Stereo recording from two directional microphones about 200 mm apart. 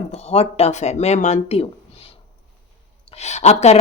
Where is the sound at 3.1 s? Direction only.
35° left (ahead or behind).